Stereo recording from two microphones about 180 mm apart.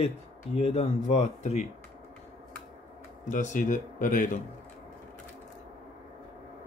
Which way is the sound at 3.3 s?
45° left (ahead or behind).